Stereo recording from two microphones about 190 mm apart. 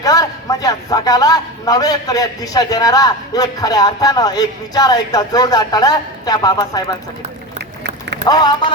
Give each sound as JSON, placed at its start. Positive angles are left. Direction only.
{"t": 0.0, "sound": "a man's voice", "side_deg": 20}
{"t": 8.2, "sound": "a man's voice", "side_deg": 20}